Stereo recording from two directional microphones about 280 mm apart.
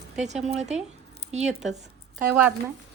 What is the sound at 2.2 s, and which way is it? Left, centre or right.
Speech, centre.